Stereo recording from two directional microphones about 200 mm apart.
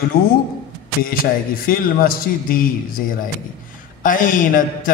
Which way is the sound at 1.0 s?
45° left (ahead or behind).